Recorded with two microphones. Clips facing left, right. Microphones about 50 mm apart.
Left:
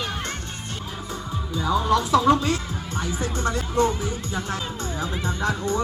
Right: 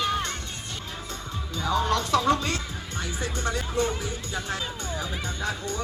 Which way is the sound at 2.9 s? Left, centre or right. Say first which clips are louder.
Left 4 dB; left.